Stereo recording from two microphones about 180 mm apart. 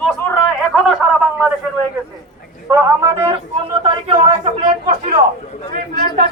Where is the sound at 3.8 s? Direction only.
30° right (ahead or behind).